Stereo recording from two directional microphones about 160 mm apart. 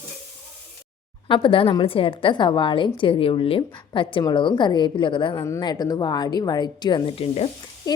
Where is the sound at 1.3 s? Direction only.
30° left (ahead or behind).